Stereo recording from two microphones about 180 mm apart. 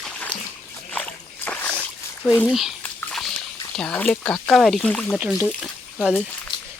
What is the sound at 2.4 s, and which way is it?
Speech, centre (ahead or behind).